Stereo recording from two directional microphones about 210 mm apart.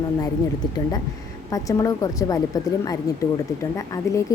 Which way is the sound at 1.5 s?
15° left (ahead or behind).